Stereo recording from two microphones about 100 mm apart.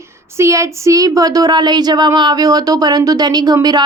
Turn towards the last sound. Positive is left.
turn(degrees=-40)  # may be behind; listen again after turning